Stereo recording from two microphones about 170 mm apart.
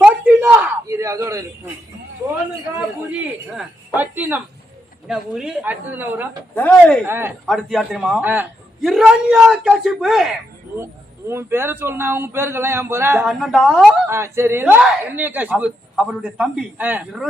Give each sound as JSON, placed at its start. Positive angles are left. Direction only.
{"t": 0.0, "sound": "a sound", "side_deg": -10}
{"t": 3.1, "sound": "speech", "side_deg": -5}
{"t": 6.5, "sound": "speech", "side_deg": 10}
{"t": 7.0, "sound": "speech", "side_deg": -15}
{"t": 7.4, "sound": "a man's voice", "side_deg": 0}
{"t": 11.3, "sound": "speech", "side_deg": -15}
{"t": 13.2, "sound": "a man's voice", "side_deg": 0}
{"t": 14.1, "sound": "speech", "side_deg": -15}